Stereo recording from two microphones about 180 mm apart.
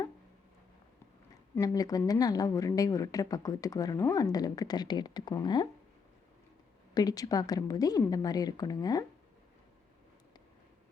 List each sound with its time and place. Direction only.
1.5 s a woman's voice: 20° left (ahead or behind)
6.9 s a woman's voice: 20° left (ahead or behind)